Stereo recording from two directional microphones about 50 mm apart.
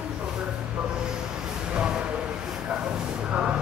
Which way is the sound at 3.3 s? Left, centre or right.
Right.